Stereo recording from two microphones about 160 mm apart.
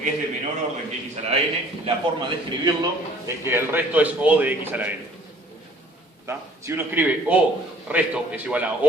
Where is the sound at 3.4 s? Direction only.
15° right (ahead or behind).